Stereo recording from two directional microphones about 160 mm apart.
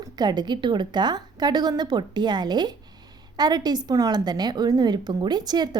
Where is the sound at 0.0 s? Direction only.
25° right (ahead or behind).